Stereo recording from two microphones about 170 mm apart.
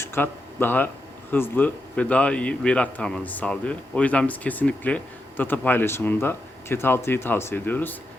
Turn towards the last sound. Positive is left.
turn(degrees=10)  # may be behind; listen again after turning